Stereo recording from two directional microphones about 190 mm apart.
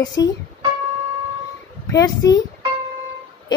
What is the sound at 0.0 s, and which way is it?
Speech, 65° left (ahead or behind).